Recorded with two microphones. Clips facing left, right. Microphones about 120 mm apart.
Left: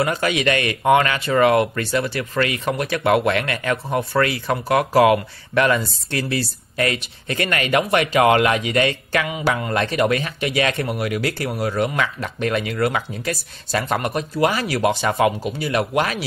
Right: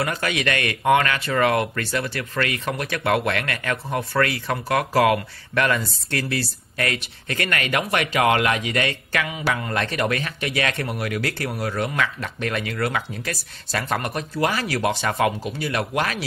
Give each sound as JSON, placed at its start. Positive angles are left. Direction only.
{"t": 0.0, "sound": "speech", "side_deg": 20}